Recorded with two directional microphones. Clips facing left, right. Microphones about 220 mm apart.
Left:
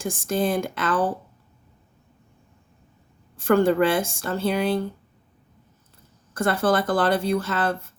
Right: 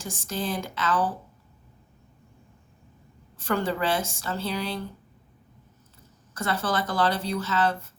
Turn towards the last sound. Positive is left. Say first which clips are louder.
# left 3 dB
turn(degrees=55)  # may be behind; listen again after turning